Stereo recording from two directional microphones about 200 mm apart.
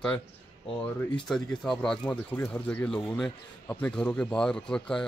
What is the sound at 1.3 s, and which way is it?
Speech, centre (ahead or behind).